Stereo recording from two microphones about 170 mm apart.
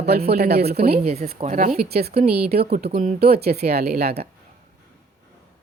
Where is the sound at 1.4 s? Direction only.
50° right (ahead or behind); by 4.3 s 70° right (ahead or behind).